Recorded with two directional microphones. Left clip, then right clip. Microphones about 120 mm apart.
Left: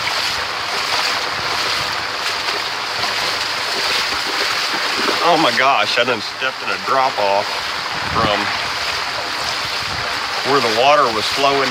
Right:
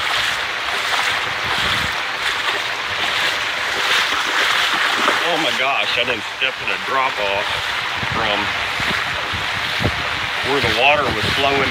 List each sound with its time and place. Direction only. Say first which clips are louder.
5.3 s speech: left 4 dB; 80° left
10.8 s speech: left 2 dB; 35° left (ahead or behind)